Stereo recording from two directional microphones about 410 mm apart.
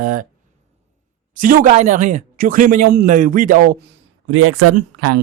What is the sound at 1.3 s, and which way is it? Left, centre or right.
A man's voice, centre.